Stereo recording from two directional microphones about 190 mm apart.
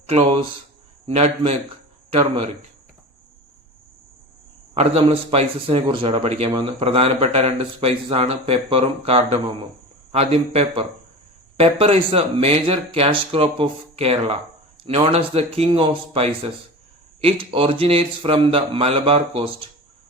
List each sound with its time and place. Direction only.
0.1 s speech: 25° right (ahead or behind)
4.7 s speech: 30° right (ahead or behind)